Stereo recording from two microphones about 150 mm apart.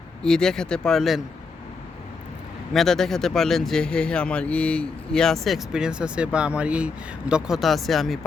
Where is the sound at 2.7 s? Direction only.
Centre (ahead or behind).